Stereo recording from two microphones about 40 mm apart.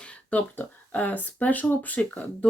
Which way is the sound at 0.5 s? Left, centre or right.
Left.